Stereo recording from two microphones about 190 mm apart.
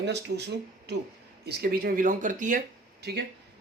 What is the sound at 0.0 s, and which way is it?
Speech, 60° right (ahead or behind).